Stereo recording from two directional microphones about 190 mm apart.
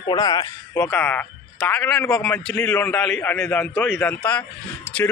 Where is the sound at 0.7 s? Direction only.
10° left (ahead or behind).